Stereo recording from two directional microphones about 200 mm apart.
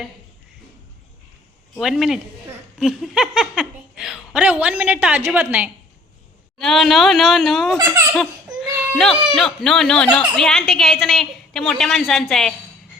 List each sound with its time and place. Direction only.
1.7 s speech: centre (ahead or behind)
9.0 s speech: centre (ahead or behind)